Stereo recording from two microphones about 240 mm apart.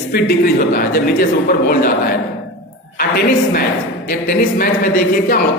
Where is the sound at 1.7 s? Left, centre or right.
Left.